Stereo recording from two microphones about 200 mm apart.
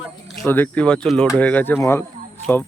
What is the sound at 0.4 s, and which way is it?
Speech, 10° left (ahead or behind).